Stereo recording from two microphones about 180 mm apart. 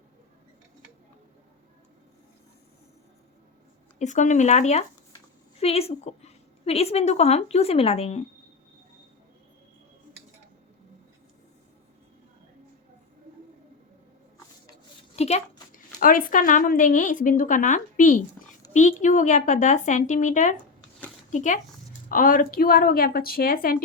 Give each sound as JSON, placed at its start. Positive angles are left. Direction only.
{"t": 3.9, "sound": "a woman's voice", "side_deg": 40}
{"t": 15.1, "sound": "a sound", "side_deg": 35}
{"t": 16.0, "sound": "speech", "side_deg": 50}